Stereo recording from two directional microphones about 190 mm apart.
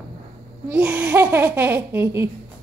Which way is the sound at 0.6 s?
10° right (ahead or behind).